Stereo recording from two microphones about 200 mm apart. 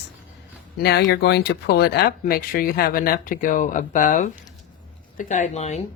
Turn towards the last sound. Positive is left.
turn(degrees=35)  # may be behind; listen again after turning